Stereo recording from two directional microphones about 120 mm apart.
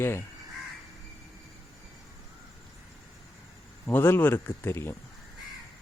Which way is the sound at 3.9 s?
20° left (ahead or behind).